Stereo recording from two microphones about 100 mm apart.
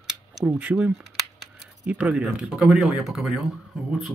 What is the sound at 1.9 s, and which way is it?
Speech, 15° right (ahead or behind).